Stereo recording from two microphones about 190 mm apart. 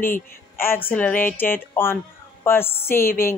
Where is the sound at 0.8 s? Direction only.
10° left (ahead or behind).